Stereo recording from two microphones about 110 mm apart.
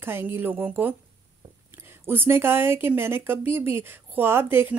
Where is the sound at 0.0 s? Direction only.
20° right (ahead or behind).